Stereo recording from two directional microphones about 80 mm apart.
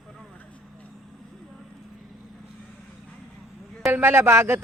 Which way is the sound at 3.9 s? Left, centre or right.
Right.